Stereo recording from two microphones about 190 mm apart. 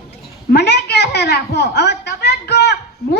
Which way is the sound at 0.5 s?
60° left (ahead or behind).